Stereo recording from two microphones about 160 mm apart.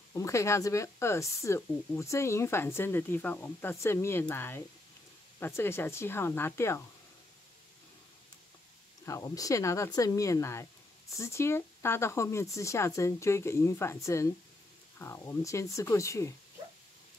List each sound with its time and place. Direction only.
0.1 s speech: 20° left (ahead or behind)
9.0 s speech: 20° left (ahead or behind)